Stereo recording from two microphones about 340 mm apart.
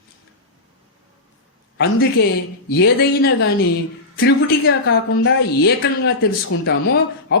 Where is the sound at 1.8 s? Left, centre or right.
Left.